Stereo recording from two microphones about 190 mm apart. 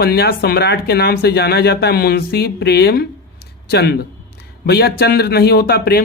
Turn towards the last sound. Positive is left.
turn(degrees=55)  # may be behind; listen again after turning